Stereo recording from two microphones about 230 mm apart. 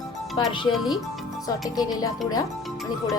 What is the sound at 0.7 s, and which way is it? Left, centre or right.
Speech, centre.